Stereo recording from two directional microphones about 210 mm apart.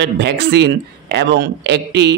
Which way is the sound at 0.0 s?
55° right (ahead or behind).